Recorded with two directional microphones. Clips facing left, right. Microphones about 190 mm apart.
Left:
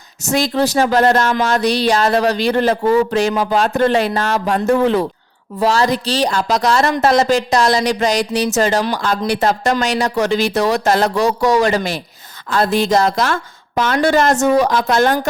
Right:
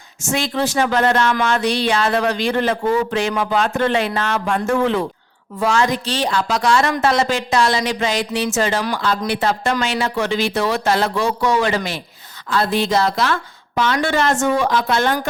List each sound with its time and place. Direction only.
0.3 s a woman's voice: 40° left (ahead or behind)